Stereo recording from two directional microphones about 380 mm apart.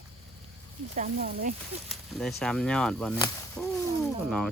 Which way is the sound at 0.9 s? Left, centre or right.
Right.